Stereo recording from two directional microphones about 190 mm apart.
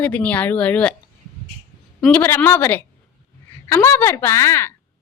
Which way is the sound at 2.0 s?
10° left (ahead or behind).